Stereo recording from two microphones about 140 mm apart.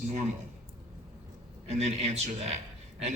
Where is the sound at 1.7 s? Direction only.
50° right (ahead or behind).